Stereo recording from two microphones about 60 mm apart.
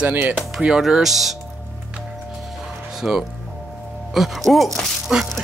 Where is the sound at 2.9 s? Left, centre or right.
Centre.